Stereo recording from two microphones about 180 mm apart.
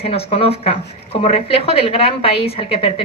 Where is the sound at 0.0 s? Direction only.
35° left (ahead or behind).